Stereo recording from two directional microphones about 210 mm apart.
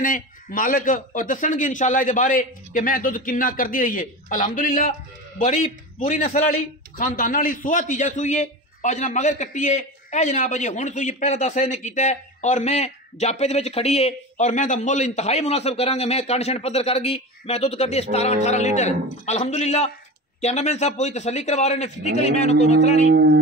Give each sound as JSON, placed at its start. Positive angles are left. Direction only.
{"t": 0.0, "sound": "a man's voice", "side_deg": 40}
{"t": 5.4, "sound": "a man's voice", "side_deg": 30}
{"t": 23.0, "sound": "speech", "side_deg": -50}